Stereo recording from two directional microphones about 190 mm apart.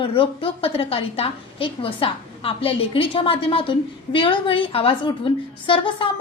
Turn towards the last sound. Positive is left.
turn(degrees=25)  # may be behind; listen again after turning